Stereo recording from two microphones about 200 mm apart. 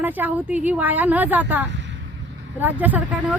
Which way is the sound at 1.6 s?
65° right (ahead or behind).